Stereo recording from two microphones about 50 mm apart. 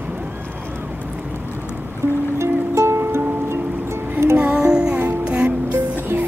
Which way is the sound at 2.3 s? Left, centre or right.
Right.